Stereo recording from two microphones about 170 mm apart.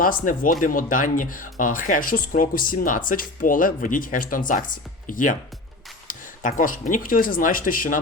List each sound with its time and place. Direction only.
0.0 s speech: 55° left (ahead or behind)